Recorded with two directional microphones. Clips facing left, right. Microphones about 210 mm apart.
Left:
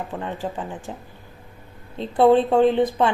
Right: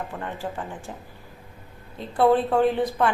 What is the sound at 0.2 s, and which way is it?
Speech, 20° left (ahead or behind).